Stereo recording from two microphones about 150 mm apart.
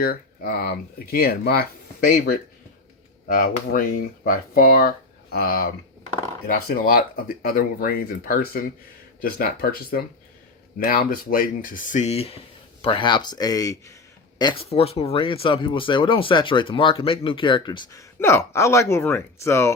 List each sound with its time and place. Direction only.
0.0 s speech: 75° left (ahead or behind); by 5.7 s 90° left
6.5 s speech: 80° left
9.2 s speech: 85° left
10.8 s speech: 70° left (ahead or behind); by 14.7 s 30° left (ahead or behind)
14.7 s speech: 40° left (ahead or behind); by 19.7 s 20° left (ahead or behind)